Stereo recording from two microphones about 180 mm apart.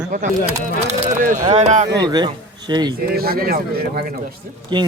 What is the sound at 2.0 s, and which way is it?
Speech, 20° right (ahead or behind).